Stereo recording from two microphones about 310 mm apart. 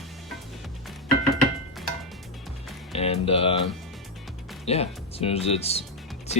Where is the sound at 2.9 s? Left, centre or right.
Centre.